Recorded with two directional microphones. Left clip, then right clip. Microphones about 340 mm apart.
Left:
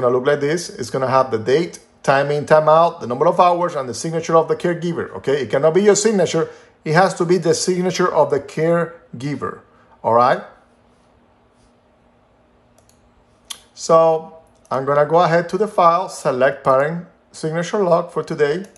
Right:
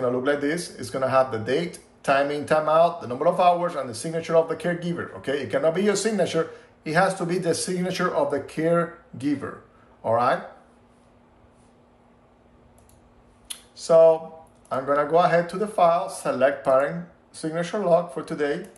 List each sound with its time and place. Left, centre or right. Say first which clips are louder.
0.0 s speech: left 7 dB; left
13.5 s a sound: left 5 dB; left
14.7 s speech: left 6 dB; left